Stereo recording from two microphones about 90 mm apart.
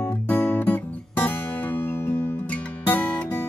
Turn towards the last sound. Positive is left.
turn(degrees=20)  # may be behind; listen again after turning